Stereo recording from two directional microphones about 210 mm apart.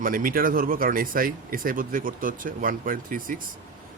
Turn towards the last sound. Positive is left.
turn(degrees=-40)  # may be behind; listen again after turning